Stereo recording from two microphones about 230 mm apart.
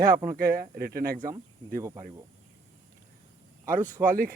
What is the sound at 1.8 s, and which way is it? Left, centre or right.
Speech, centre.